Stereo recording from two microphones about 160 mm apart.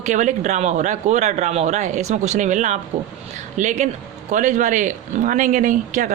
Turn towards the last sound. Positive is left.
turn(degrees=-50)  # may be behind; listen again after turning